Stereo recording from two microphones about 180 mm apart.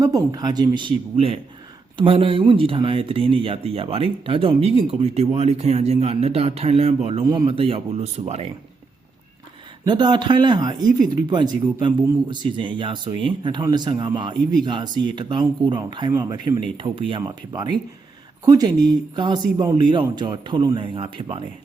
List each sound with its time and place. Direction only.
0.0 s speech: 20° right (ahead or behind); by 8.4 s 35° right (ahead or behind)
9.8 s speech: 25° right (ahead or behind)